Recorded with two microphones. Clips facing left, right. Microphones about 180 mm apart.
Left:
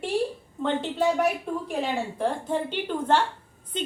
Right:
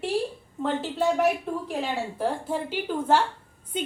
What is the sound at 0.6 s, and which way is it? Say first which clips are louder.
A woman's voice: left 1 dB; centre (ahead or behind).